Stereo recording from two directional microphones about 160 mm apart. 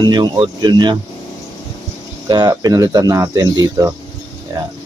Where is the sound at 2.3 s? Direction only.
25° right (ahead or behind).